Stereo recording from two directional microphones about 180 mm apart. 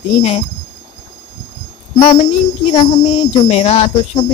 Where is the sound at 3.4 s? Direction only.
35° left (ahead or behind).